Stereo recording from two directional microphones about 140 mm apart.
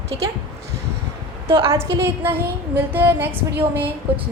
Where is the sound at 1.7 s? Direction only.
15° right (ahead or behind).